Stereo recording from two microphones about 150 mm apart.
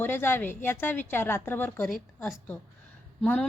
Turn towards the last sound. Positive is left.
turn(degrees=5)  # may be behind; listen again after turning